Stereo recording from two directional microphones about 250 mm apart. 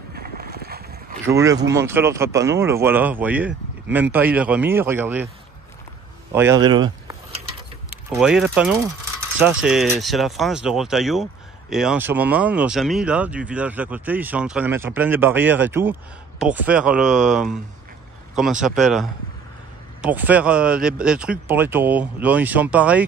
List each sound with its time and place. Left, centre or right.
0.1 s boat: right
1.2 s speech: centre
6.3 s speech: centre
8.1 s speech: centre